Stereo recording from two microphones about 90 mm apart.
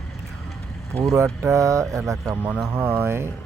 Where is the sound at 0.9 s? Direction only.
35° right (ahead or behind).